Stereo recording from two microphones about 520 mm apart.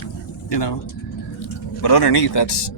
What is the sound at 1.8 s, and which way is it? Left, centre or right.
Speech, left.